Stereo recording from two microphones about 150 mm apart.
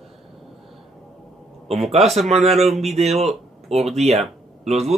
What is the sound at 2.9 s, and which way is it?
Speech, 45° right (ahead or behind).